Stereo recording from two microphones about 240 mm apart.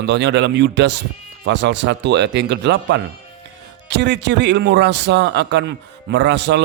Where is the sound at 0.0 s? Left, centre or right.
Right.